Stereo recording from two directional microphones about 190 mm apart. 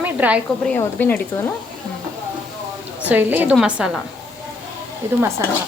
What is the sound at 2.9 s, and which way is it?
A woman's voice, 10° right (ahead or behind).